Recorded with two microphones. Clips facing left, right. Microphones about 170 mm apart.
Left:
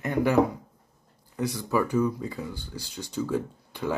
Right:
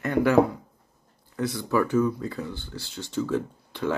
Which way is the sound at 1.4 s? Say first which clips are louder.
Right 2 dB; 15° left (ahead or behind).